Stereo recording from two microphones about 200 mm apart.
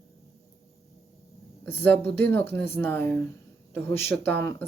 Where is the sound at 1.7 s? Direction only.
10° left (ahead or behind).